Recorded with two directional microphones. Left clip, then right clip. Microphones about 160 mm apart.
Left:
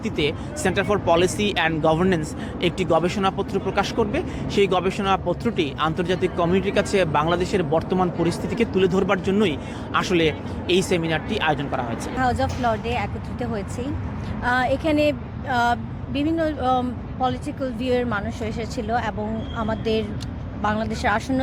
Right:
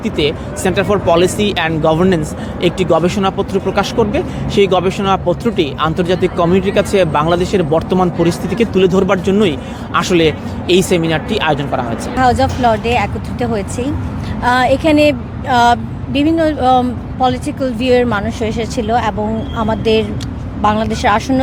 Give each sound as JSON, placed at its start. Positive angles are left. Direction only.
{"t": 0.0, "sound": "speech", "side_deg": 0}
{"t": 12.1, "sound": "a woman's voice", "side_deg": -25}